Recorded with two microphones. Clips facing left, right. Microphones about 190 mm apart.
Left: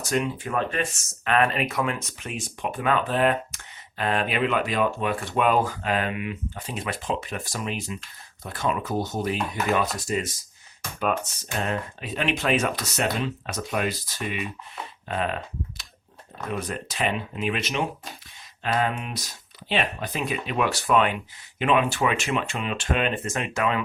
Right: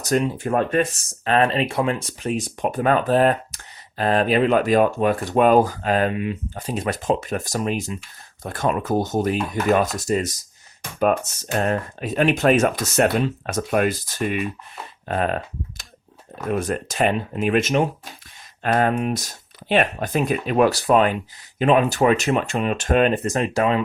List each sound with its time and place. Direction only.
0.0 s speech: 40° right (ahead or behind)
11.5 s speech: 45° right (ahead or behind)
16.5 s speech: 45° right (ahead or behind)